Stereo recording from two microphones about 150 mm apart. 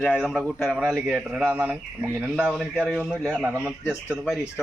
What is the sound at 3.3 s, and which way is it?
Speech, 10° right (ahead or behind).